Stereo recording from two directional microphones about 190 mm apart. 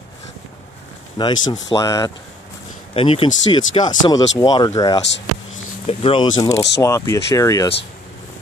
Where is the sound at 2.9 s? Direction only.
30° left (ahead or behind).